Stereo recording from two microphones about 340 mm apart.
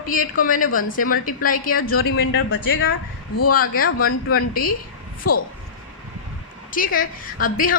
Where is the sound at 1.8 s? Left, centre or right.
Left.